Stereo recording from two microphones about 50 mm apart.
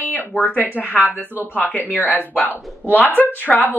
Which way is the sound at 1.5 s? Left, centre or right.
Left.